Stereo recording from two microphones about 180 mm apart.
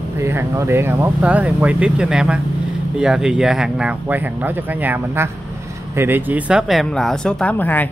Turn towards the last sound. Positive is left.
turn(degrees=10)  # may be behind; listen again after turning